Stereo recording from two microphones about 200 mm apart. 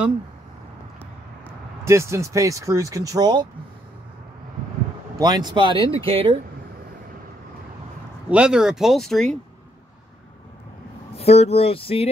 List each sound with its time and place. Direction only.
1.9 s speech: 15° right (ahead or behind)
5.1 s speech: 20° right (ahead or behind)
8.3 s speech: 5° right (ahead or behind)
11.1 s speech: 30° left (ahead or behind)